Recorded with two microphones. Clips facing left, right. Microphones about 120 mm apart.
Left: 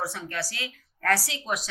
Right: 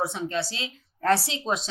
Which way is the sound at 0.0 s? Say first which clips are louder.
Right 5 dB; 20° right (ahead or behind).